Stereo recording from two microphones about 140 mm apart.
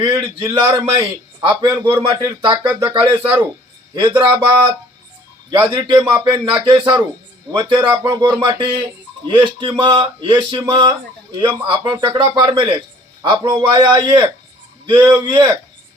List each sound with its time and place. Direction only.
0.0 s speech: 35° right (ahead or behind)
5.5 s a man's voice: 35° right (ahead or behind)